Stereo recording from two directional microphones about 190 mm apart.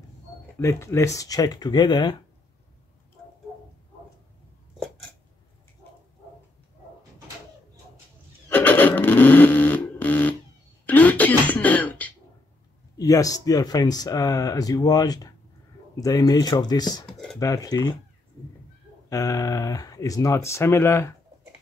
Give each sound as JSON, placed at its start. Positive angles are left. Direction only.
{"t": 0.6, "sound": "speech", "side_deg": 15}
{"t": 8.5, "sound": "a sound", "side_deg": 10}
{"t": 10.9, "sound": "throat clearing", "side_deg": 10}
{"t": 12.9, "sound": "speech", "side_deg": 20}
{"t": 19.0, "sound": "speech", "side_deg": 20}